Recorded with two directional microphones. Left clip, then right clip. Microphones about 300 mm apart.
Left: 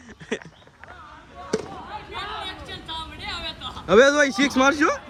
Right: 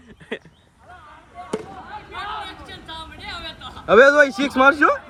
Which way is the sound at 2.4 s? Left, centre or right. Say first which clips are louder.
Left 1 dB; centre.